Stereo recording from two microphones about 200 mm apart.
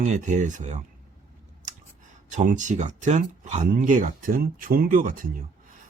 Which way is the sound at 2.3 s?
40° right (ahead or behind).